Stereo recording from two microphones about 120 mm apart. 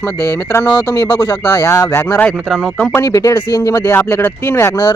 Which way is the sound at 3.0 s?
30° left (ahead or behind).